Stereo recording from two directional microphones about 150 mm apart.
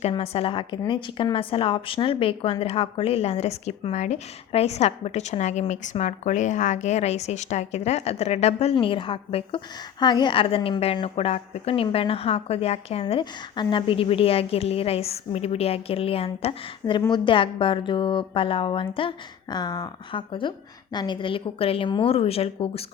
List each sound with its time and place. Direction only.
0.0 s a woman's voice: 40° left (ahead or behind)
8.7 s a woman's voice: 35° left (ahead or behind)